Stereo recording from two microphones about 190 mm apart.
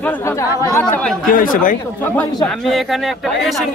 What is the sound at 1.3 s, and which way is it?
Speech, 45° left (ahead or behind).